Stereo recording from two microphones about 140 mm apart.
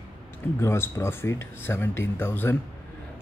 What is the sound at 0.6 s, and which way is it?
Speech, 20° left (ahead or behind).